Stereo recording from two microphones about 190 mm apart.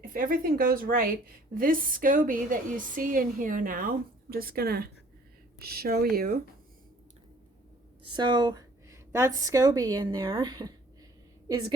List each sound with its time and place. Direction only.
0.0 s speech: 45° right (ahead or behind)
8.1 s a woman's voice: 25° right (ahead or behind)